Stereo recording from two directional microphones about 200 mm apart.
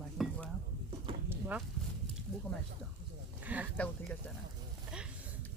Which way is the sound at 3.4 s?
5° right (ahead or behind).